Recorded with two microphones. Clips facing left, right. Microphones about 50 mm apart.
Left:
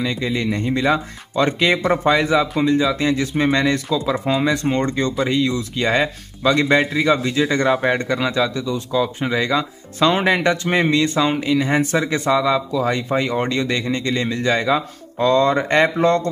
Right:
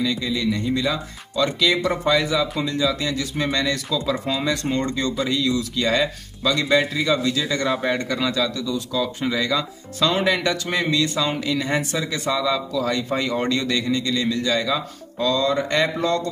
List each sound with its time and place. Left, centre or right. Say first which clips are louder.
0.0 s speech: left 1 dB; left
0.3 s speech: left 2 dB; left